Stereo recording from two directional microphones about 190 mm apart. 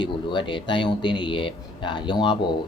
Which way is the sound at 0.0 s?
25° left (ahead or behind).